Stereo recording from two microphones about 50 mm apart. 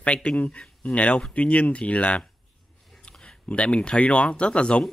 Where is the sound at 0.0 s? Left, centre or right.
Left.